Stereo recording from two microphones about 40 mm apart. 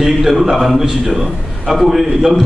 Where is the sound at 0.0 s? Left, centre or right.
Centre.